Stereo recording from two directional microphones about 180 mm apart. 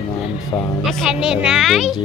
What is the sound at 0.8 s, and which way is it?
Speech, centre (ahead or behind).